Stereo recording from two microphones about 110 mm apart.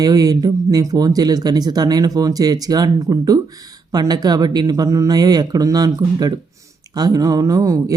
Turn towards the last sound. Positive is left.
turn(degrees=-30)  # may be behind; listen again after turning